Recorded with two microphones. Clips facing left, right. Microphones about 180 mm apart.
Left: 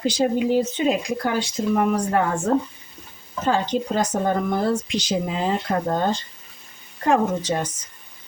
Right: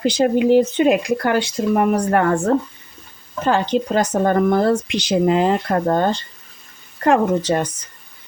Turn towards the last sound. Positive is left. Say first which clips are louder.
# right 4 dB
turn(degrees=-65)  # may be behind; listen again after turning